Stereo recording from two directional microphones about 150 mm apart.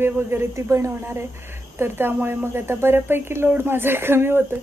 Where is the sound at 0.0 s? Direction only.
15° right (ahead or behind).